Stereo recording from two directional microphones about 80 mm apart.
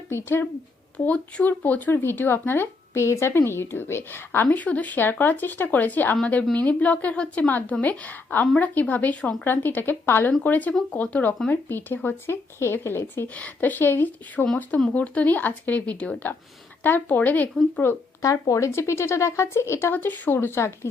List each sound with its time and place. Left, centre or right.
0.1 s speech: left
0.9 s speech: centre
18.2 s speech: left